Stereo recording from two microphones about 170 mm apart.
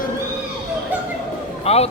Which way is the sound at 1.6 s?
35° left (ahead or behind).